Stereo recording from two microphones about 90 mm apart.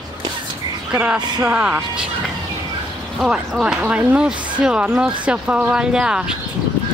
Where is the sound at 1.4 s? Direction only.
15° right (ahead or behind).